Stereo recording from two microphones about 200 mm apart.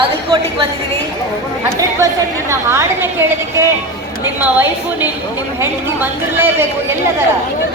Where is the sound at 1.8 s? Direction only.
15° right (ahead or behind).